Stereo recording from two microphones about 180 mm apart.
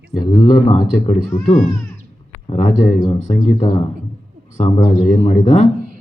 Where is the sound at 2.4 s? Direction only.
35° left (ahead or behind).